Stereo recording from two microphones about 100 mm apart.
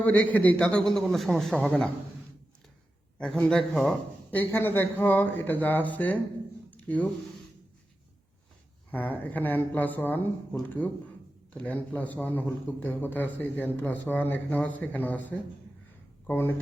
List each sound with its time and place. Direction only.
0.0 s a man's voice: 15° left (ahead or behind); by 1.5 s centre (ahead or behind)
3.2 s speech: 10° left (ahead or behind)
4.3 s speech: 20° left (ahead or behind)
6.7 s a sound: 15° left (ahead or behind)
8.9 s a man's voice: 15° left (ahead or behind)